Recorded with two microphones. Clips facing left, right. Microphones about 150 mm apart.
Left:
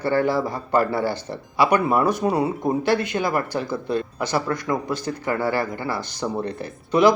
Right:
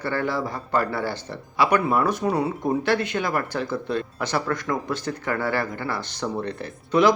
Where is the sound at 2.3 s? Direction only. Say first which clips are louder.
Left 2 dB; 10° left (ahead or behind).